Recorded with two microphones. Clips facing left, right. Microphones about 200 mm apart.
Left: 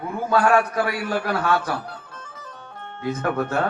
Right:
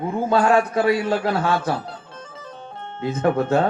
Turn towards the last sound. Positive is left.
turn(degrees=-25)  # may be behind; listen again after turning